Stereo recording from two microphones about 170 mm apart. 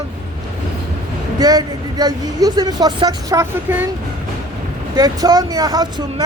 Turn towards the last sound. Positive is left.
turn(degrees=-25)  # may be behind; listen again after turning